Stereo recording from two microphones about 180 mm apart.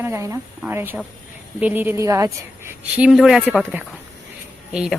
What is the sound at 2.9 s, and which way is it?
A woman's voice, 5° right (ahead or behind).